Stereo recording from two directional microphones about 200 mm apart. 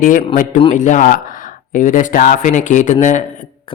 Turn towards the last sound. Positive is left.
turn(degrees=40)  # may be behind; listen again after turning